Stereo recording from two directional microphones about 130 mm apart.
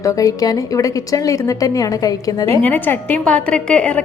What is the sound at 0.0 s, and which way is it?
A woman's voice, 25° left (ahead or behind).